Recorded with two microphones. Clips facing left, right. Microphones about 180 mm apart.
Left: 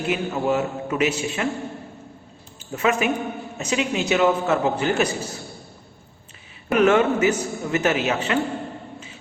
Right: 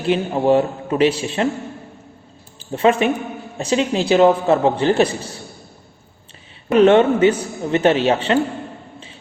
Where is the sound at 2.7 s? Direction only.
30° right (ahead or behind).